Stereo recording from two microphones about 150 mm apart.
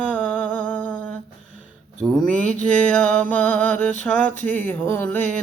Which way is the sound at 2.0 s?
Centre (ahead or behind).